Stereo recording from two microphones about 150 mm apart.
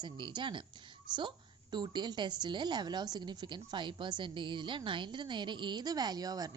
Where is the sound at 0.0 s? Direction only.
30° right (ahead or behind).